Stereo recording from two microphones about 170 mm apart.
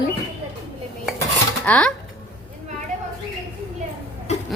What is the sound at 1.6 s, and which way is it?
Speech, 10° left (ahead or behind).